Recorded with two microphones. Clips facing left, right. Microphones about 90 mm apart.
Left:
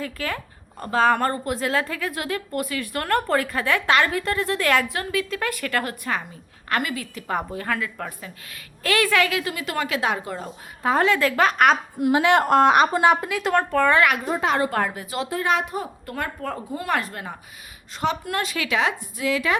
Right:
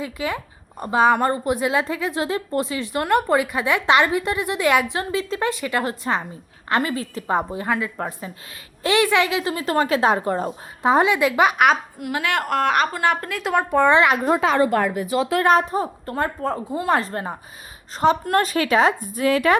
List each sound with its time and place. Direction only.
0.0 s a woman's voice: 15° right (ahead or behind); by 10.5 s 40° right (ahead or behind)
10.8 s a woman's voice: 15° right (ahead or behind)
11.9 s a woman's voice: 25° left (ahead or behind)
13.2 s speech: centre (ahead or behind)
13.7 s a woman's voice: 20° right (ahead or behind)
15.4 s a woman's voice: 35° right (ahead or behind)